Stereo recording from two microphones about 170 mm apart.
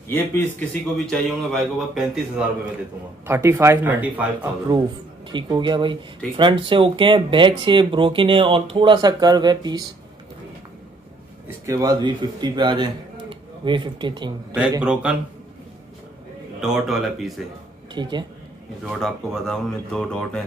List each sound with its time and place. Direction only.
0.1 s a man's voice: 15° left (ahead or behind)
3.3 s speech: 15° right (ahead or behind)
4.7 s speech: 25° right (ahead or behind)
11.4 s a man's voice: 15° right (ahead or behind)
14.8 s speech: 5° right (ahead or behind)
16.6 s a man's voice: centre (ahead or behind)
17.9 s speech: 25° right (ahead or behind)
18.9 s a man's voice: centre (ahead or behind)